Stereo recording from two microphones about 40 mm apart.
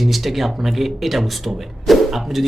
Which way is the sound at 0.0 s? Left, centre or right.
Centre.